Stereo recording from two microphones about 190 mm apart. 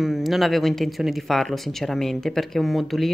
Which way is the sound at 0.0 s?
Centre (ahead or behind).